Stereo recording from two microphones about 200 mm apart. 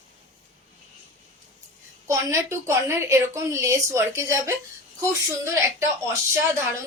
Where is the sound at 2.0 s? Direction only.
15° right (ahead or behind).